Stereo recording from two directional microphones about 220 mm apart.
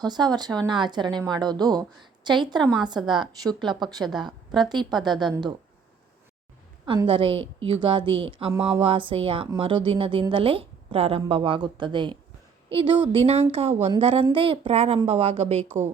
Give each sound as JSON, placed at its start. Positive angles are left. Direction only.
{"t": 0.0, "sound": "speech", "side_deg": -20}
{"t": 3.0, "sound": "a woman's voice", "side_deg": 0}
{"t": 3.7, "sound": "a woman's voice", "side_deg": -20}
{"t": 6.8, "sound": "speech", "side_deg": -25}